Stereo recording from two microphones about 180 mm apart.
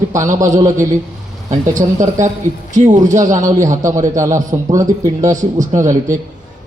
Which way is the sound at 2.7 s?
45° right (ahead or behind).